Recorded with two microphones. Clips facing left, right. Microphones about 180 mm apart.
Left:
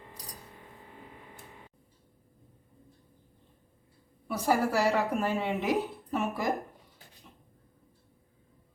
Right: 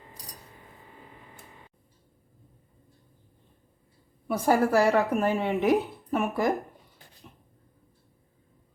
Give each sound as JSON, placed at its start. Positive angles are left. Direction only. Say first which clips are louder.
{"t": 4.3, "sound": "speech", "louder": "right 5 dB", "side_deg": -50}